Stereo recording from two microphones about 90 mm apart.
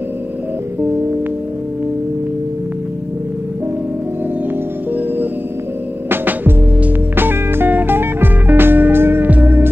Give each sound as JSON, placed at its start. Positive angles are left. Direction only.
{"t": 6.0, "sound": "music", "side_deg": -20}